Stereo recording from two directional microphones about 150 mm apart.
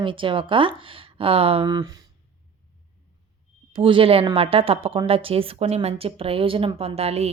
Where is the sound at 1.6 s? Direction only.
25° right (ahead or behind).